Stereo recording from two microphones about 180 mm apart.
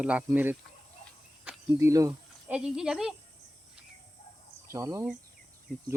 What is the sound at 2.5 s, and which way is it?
Speech, 5° right (ahead or behind).